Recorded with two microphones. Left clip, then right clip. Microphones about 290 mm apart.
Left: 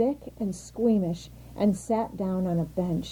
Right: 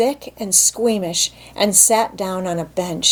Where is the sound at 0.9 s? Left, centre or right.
Centre.